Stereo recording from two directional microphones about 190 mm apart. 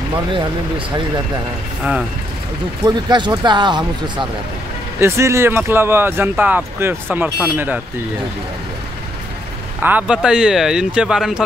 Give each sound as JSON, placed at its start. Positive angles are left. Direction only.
{"t": 0.3, "sound": "speech", "side_deg": -25}
{"t": 2.8, "sound": "speech", "side_deg": -25}
{"t": 9.8, "sound": "speech", "side_deg": -10}